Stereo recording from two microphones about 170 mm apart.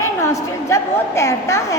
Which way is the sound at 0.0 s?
20° left (ahead or behind).